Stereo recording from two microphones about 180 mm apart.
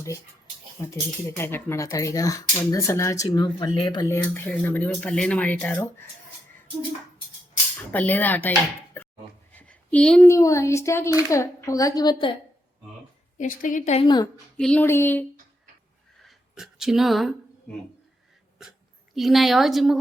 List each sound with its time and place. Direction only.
0.8 s a woman's voice: 20° left (ahead or behind)
7.9 s speech: 10° left (ahead or behind)
8.9 s a sound: 10° left (ahead or behind)
9.5 s speech: 10° left (ahead or behind)
13.4 s a woman's voice: 45° left (ahead or behind)
14.0 s a woman's voice: 25° left (ahead or behind)
14.5 s speech: 5° left (ahead or behind)
16.2 s a sound: centre (ahead or behind)
19.1 s a woman's voice: centre (ahead or behind)